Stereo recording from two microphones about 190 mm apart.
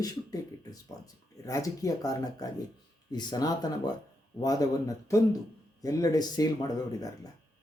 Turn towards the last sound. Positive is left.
turn(degrees=20)  # may be behind; listen again after turning